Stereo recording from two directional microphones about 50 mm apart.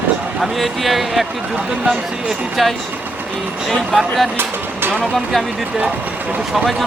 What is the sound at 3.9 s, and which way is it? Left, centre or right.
Speech, centre.